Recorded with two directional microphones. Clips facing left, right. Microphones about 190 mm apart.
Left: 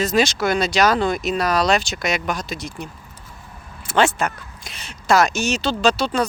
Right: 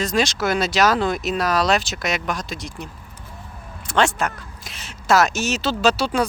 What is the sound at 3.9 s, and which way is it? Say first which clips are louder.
Speech: left 1 dB; 5° left (ahead or behind).